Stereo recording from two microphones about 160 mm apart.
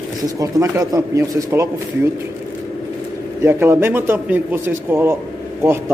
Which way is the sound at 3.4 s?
15° right (ahead or behind).